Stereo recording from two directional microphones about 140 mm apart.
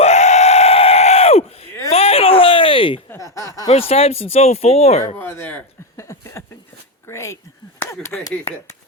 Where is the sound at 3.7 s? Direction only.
45° left (ahead or behind).